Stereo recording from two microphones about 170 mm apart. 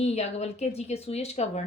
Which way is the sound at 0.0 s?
40° left (ahead or behind).